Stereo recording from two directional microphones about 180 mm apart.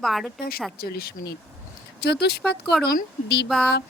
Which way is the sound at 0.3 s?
55° left (ahead or behind).